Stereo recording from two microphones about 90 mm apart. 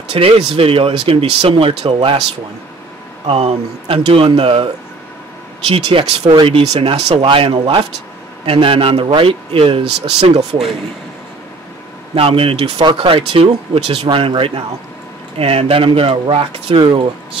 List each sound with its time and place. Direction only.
0.1 s speech: 90° right
3.3 s speech: 90° right
5.7 s speech: 85° right
12.2 s speech: 90° right; by 17.1 s 60° right (ahead or behind)